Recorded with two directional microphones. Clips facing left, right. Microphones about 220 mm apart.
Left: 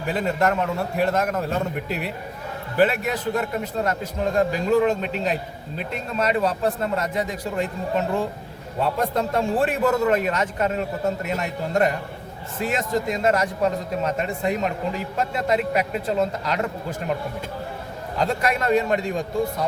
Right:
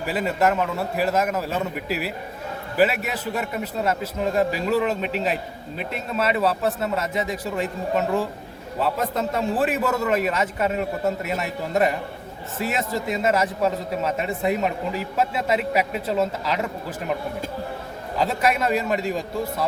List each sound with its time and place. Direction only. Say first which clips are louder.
0.0 s a man's voice: even; 5° right (ahead or behind)
18.2 s a man's voice: right 1 dB; 5° right (ahead or behind)